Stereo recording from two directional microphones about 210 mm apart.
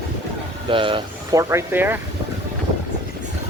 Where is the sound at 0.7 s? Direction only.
25° right (ahead or behind).